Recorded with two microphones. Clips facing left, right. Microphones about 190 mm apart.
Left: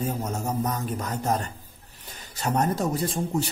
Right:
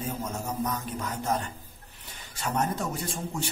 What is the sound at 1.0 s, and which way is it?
A man's voice, 40° left (ahead or behind).